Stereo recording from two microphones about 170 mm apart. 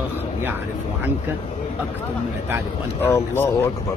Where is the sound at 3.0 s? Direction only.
15° left (ahead or behind).